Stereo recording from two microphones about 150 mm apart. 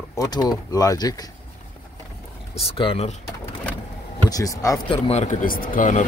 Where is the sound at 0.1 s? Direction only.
25° left (ahead or behind).